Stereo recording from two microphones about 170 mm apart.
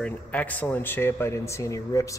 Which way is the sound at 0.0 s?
10° left (ahead or behind).